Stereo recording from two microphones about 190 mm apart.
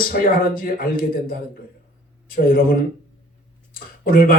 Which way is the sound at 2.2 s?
50° left (ahead or behind).